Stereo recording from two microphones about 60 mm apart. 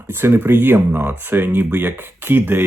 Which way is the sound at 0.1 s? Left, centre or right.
Right.